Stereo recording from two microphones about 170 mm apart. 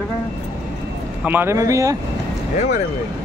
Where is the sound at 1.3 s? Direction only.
15° right (ahead or behind).